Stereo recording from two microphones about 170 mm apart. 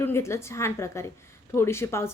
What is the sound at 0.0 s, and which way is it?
Speech, 15° left (ahead or behind).